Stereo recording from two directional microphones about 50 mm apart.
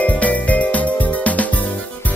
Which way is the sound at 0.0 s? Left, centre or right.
Left.